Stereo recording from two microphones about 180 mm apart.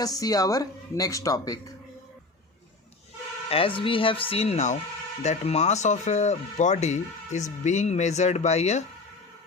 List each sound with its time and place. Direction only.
0.0 s speech: 20° left (ahead or behind)
3.5 s speech: 30° left (ahead or behind)